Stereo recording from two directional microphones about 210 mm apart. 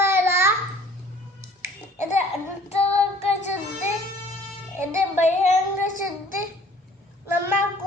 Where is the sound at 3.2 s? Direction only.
30° left (ahead or behind).